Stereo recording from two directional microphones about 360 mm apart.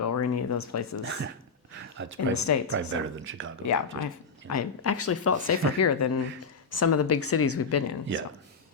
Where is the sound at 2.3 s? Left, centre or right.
Left.